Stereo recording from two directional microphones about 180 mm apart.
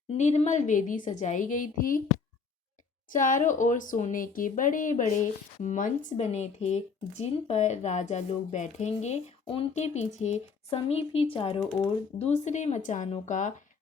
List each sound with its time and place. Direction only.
0.1 s speech: 40° left (ahead or behind)
3.1 s speech: 45° left (ahead or behind)